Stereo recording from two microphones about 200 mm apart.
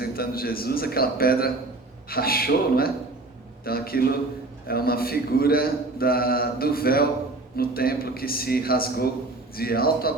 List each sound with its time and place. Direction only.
0.0 s a man's voice: 50° left (ahead or behind)